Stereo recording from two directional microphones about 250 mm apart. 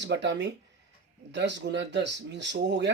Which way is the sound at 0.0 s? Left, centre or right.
Right.